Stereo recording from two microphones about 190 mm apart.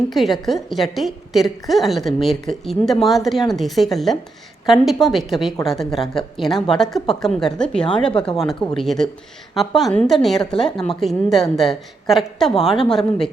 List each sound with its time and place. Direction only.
0.1 s a woman's voice: centre (ahead or behind)